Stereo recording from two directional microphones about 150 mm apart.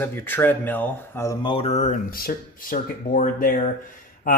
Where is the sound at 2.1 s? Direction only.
75° left (ahead or behind).